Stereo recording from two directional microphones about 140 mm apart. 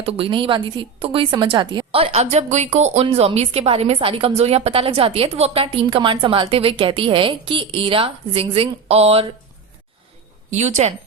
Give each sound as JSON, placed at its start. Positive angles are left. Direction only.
{"t": 0.0, "sound": "speech", "side_deg": -40}
{"t": 10.5, "sound": "a woman's voice", "side_deg": -55}